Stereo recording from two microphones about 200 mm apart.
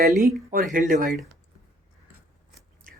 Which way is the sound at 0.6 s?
45° right (ahead or behind).